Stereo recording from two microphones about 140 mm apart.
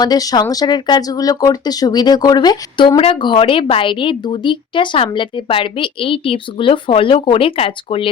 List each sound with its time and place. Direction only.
0.0 s speech: 25° left (ahead or behind); by 8.0 s 45° left (ahead or behind)